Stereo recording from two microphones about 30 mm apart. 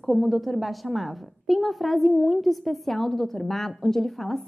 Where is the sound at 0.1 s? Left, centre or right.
Centre.